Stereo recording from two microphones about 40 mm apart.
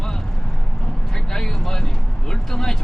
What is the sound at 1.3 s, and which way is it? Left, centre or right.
Vehicle, centre.